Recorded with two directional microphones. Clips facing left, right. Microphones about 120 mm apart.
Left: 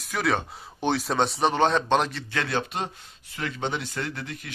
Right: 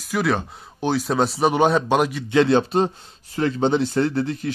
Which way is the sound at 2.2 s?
25° right (ahead or behind).